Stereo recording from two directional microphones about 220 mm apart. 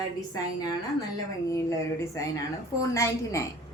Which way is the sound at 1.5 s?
15° left (ahead or behind).